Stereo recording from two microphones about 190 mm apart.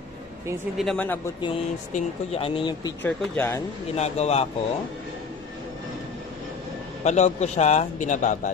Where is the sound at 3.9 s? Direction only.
35° left (ahead or behind).